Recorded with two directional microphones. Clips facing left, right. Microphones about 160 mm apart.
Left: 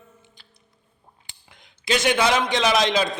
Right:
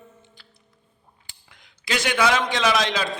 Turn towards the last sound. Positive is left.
turn(degrees=20)  # may be behind; listen again after turning